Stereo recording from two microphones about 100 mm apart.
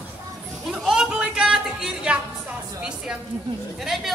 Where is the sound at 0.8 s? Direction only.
5° right (ahead or behind).